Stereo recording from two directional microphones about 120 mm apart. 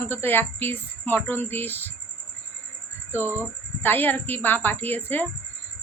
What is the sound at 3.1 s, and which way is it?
Speech, 20° left (ahead or behind).